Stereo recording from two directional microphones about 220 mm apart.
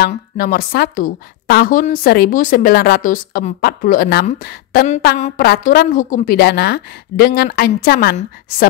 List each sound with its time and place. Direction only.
0.1 s a woman's voice: 40° left (ahead or behind)